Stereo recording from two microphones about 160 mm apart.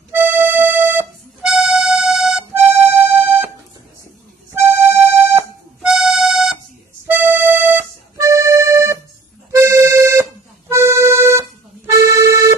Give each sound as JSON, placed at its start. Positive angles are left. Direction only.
{"t": 0.1, "sound": "music", "side_deg": -15}
{"t": 1.4, "sound": "music", "side_deg": -5}
{"t": 2.5, "sound": "music", "side_deg": -15}
{"t": 4.6, "sound": "music", "side_deg": -15}
{"t": 5.9, "sound": "music", "side_deg": -5}
{"t": 7.1, "sound": "music", "side_deg": -15}
{"t": 10.7, "sound": "accordion", "side_deg": -15}